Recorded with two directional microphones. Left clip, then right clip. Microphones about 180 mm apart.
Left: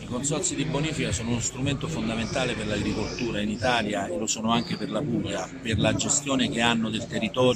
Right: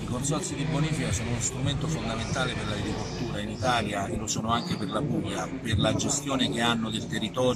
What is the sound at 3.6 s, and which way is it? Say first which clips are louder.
Speech: left 1 dB; 35° left (ahead or behind).